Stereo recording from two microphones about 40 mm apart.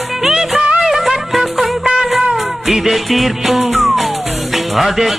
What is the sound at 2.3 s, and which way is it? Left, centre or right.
Music, centre.